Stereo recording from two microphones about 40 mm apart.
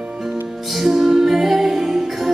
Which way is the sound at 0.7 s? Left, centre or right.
Centre.